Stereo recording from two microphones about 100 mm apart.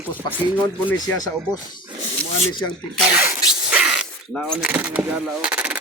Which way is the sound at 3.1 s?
15° right (ahead or behind).